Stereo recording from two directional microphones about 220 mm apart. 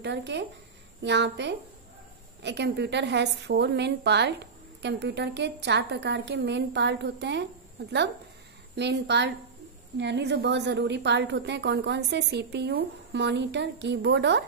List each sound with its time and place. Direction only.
0.0 s a woman's voice: 50° right (ahead or behind)